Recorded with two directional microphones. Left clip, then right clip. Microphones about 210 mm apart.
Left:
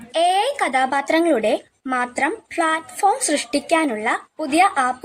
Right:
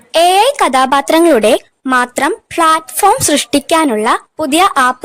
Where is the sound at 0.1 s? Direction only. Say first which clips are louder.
Right 9 dB; 50° right (ahead or behind).